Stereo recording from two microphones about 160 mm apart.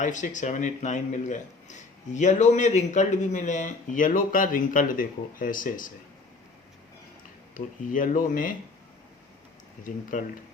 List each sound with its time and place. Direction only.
0.0 s speech: 50° left (ahead or behind)
7.5 s speech: 55° left (ahead or behind)
9.8 s speech: 55° left (ahead or behind)